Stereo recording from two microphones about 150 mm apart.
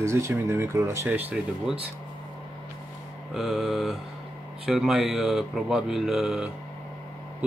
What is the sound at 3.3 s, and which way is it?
Speech, centre (ahead or behind).